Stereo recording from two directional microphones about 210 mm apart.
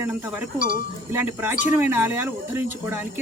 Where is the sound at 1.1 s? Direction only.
10° right (ahead or behind).